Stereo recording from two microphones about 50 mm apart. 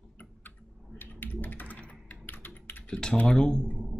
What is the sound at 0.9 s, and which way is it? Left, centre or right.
Typing, left.